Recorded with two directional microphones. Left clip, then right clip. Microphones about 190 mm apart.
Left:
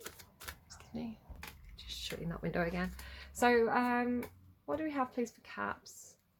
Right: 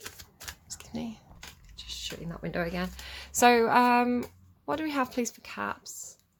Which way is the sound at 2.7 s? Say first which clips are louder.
Right 4 dB; 20° right (ahead or behind).